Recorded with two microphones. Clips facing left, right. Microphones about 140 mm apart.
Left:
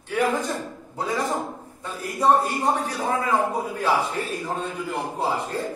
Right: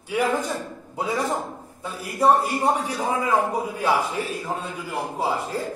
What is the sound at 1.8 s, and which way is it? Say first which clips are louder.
A man's voice: right 2 dB; 10° right (ahead or behind).